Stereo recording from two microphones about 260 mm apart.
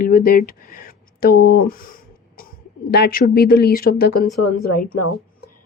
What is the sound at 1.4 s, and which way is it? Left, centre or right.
Speech, left.